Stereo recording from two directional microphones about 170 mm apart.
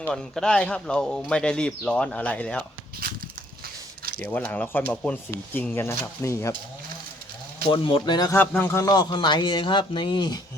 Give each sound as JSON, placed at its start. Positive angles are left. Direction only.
{"t": 0.1, "sound": "a man's voice", "side_deg": 5}
{"t": 3.0, "sound": "a sound", "side_deg": -60}
{"t": 4.3, "sound": "speech", "side_deg": 10}
{"t": 7.7, "sound": "a man's voice", "side_deg": 30}
{"t": 8.4, "sound": "a man's voice", "side_deg": 15}